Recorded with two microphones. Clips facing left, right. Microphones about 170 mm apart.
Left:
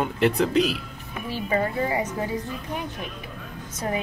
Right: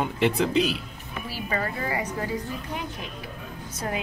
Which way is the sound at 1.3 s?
20° left (ahead or behind).